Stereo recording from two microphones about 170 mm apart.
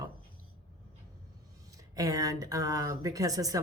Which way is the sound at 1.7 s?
20° right (ahead or behind).